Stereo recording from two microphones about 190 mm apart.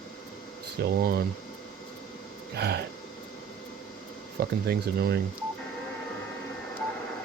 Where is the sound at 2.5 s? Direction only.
55° right (ahead or behind).